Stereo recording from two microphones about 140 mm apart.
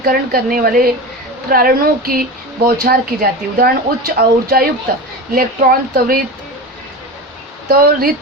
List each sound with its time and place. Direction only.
0.0 s speech: 90° right
7.7 s speech: 90° right